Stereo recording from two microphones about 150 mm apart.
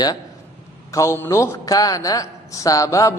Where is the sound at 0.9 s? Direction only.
20° left (ahead or behind).